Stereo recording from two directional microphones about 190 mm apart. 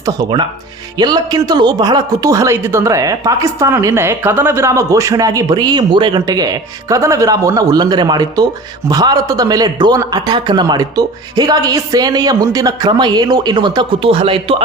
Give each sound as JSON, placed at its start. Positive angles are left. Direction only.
{"t": 0.0, "sound": "a man's voice", "side_deg": -20}